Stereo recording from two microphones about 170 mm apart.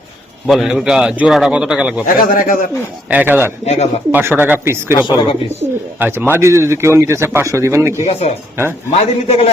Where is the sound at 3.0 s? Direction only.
10° right (ahead or behind).